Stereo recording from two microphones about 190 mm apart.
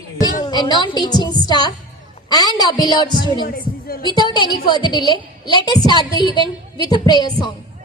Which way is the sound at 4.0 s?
25° left (ahead or behind).